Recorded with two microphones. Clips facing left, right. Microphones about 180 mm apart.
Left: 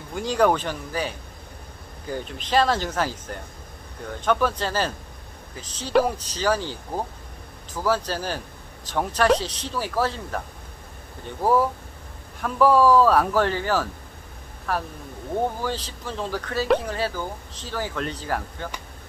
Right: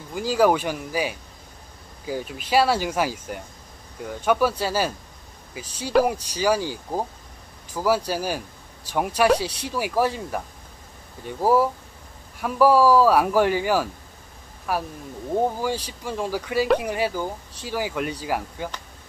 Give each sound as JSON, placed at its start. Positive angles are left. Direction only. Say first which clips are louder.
{"t": 0.1, "sound": "speech", "louder": "right 1 dB", "side_deg": -5}